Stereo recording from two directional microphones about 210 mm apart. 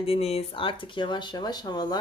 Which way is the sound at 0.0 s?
30° left (ahead or behind).